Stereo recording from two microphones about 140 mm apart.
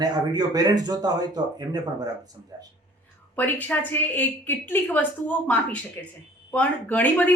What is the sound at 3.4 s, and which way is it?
A woman's voice, 10° left (ahead or behind).